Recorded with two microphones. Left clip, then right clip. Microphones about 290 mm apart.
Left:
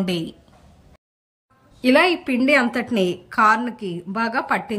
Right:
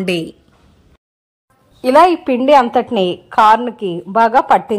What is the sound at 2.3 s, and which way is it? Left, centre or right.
Speech, centre.